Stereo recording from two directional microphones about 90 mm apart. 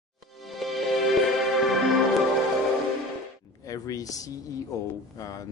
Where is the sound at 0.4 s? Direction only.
Centre (ahead or behind).